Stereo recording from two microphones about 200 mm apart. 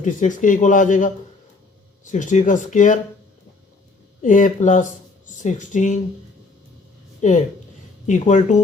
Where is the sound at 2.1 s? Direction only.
40° left (ahead or behind).